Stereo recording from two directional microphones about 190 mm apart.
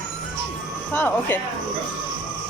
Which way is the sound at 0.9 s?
10° left (ahead or behind).